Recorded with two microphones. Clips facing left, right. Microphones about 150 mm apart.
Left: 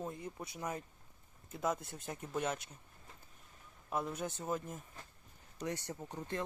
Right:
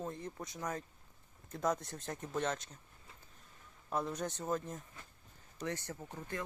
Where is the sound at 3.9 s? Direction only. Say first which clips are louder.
Right 1 dB; 5° left (ahead or behind).